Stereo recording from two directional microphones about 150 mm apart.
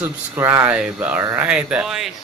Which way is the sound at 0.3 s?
15° right (ahead or behind).